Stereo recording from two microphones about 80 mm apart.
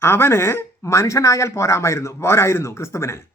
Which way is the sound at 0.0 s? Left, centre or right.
Left.